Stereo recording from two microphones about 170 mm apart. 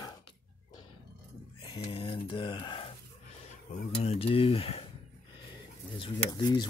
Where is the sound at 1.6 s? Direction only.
30° left (ahead or behind).